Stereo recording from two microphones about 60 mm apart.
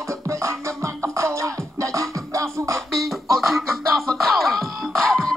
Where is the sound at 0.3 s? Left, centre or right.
Right.